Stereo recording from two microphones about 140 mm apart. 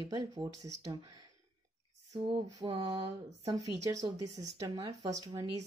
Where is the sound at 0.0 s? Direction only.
30° right (ahead or behind).